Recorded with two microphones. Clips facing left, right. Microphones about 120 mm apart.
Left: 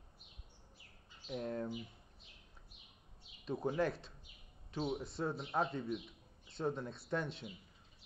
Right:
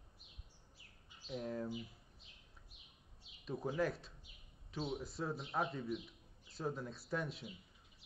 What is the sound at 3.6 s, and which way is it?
A man's voice, centre (ahead or behind).